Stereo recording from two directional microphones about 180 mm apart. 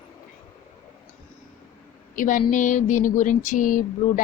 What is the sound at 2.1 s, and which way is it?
Speech, 45° left (ahead or behind).